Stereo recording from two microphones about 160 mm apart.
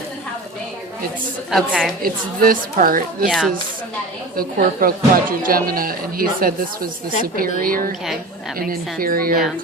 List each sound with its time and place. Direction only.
1.5 s a woman's voice: centre (ahead or behind)
2.0 s speech: 65° right (ahead or behind)
3.2 s a woman's voice: centre (ahead or behind)
4.4 s speech: 65° right (ahead or behind)